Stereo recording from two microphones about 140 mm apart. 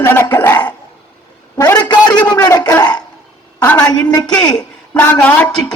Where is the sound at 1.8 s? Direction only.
30° left (ahead or behind).